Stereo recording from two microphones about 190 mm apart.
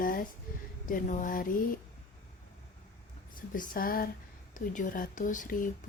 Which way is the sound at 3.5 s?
50° left (ahead or behind).